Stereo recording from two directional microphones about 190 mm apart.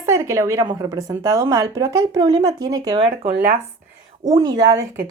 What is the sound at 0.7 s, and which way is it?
Speech, 15° right (ahead or behind).